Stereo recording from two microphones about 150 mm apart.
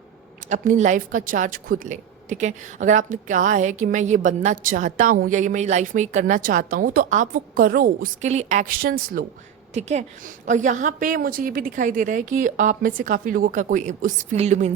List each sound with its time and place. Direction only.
0.4 s a woman's voice: 55° right (ahead or behind); by 8.1 s 70° right (ahead or behind)
8.2 s a woman's voice: 50° right (ahead or behind)
8.7 s a woman's voice: 75° right (ahead or behind)
9.7 s a woman's voice: 50° right (ahead or behind)